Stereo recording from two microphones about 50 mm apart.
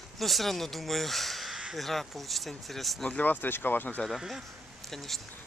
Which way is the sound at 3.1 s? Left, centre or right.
Left.